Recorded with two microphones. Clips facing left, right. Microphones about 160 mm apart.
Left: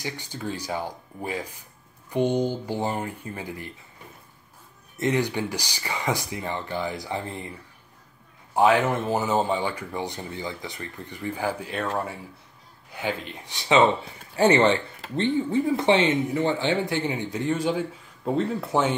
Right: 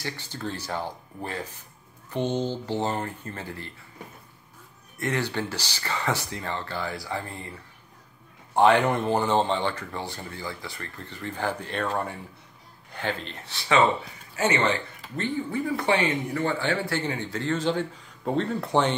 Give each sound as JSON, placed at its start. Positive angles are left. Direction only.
{"t": 0.0, "sound": "speech", "side_deg": 15}
{"t": 4.9, "sound": "speech", "side_deg": 20}
{"t": 8.5, "sound": "speech", "side_deg": 5}
{"t": 14.3, "sound": "speech", "side_deg": 35}